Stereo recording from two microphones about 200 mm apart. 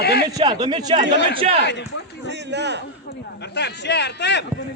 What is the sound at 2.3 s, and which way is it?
Speech, 60° right (ahead or behind).